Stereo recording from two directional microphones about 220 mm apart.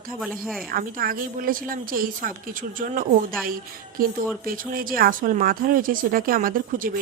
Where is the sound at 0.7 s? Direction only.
40° right (ahead or behind).